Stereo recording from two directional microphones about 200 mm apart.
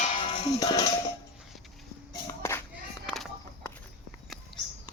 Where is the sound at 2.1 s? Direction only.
15° left (ahead or behind).